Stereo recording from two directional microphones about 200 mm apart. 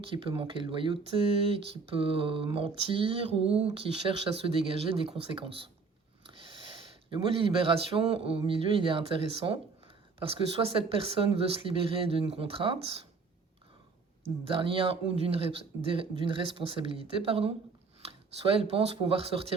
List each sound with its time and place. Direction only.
0.0 s speech: 25° right (ahead or behind)
14.3 s speech: 25° right (ahead or behind)